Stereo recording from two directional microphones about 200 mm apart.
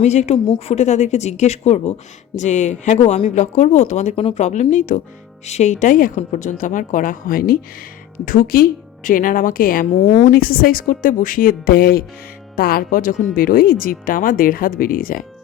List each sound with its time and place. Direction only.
0.0 s a woman's voice: 35° left (ahead or behind)
0.3 s a woman's voice: 25° left (ahead or behind); by 15.3 s 45° left (ahead or behind)